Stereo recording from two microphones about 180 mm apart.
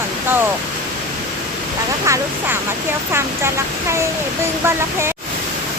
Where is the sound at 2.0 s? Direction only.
15° right (ahead or behind).